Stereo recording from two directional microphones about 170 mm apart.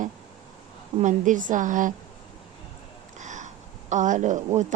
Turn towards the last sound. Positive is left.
turn(degrees=-45)  # may be behind; listen again after turning